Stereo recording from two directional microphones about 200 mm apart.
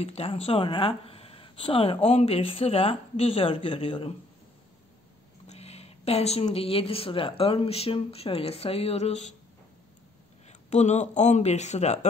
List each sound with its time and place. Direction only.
0.0 s speech: 30° left (ahead or behind)
5.5 s speech: 30° left (ahead or behind)
10.7 s speech: 35° left (ahead or behind)